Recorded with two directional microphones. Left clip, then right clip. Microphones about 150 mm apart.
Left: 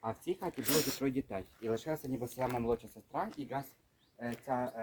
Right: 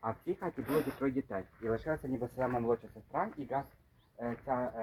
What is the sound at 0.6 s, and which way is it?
Speech, 55° left (ahead or behind).